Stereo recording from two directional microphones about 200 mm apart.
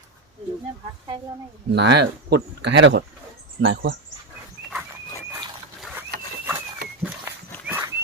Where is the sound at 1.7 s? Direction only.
60° right (ahead or behind).